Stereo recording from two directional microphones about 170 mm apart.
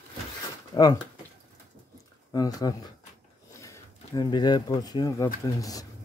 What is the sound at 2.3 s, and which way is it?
Speech, 20° left (ahead or behind).